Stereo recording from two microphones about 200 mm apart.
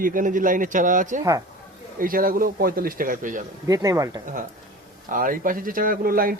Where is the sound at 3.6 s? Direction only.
15° right (ahead or behind).